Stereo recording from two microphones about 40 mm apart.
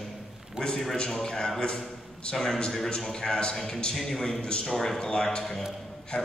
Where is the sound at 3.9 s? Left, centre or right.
Centre.